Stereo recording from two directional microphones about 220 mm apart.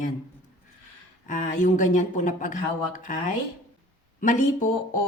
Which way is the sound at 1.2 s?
35° left (ahead or behind).